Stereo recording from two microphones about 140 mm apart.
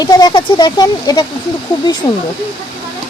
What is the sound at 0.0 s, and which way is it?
Speech, 30° left (ahead or behind).